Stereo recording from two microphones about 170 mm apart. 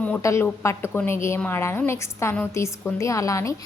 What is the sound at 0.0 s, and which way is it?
A woman's voice, 15° left (ahead or behind).